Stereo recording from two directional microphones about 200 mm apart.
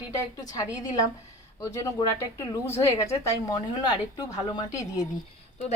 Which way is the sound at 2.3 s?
15° left (ahead or behind).